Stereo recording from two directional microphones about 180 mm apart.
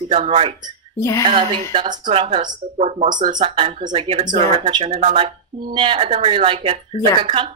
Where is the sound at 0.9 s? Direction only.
15° left (ahead or behind).